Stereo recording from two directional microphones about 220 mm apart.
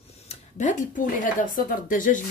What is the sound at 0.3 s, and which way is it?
Speech, 35° left (ahead or behind).